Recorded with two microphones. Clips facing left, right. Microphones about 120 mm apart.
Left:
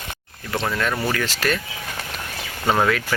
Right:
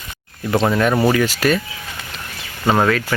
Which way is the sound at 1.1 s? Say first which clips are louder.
Right 6 dB; 10° right (ahead or behind).